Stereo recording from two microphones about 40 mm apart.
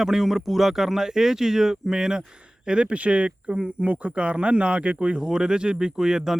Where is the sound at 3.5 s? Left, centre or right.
Centre.